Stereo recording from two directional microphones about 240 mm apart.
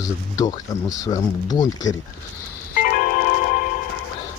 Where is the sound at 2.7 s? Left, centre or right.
Left.